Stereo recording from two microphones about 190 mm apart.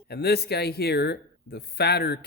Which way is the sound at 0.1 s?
55° left (ahead or behind).